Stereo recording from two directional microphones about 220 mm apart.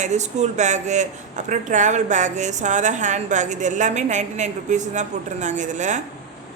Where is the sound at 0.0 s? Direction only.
30° right (ahead or behind).